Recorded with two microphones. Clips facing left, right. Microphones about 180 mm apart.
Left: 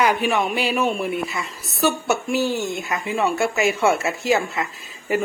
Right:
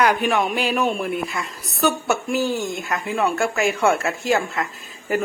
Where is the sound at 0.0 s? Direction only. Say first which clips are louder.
Right 1 dB; centre (ahead or behind).